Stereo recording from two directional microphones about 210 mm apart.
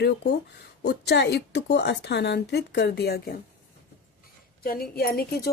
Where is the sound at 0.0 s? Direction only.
50° left (ahead or behind).